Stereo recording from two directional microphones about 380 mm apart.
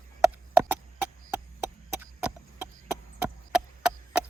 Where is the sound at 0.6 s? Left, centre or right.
Centre.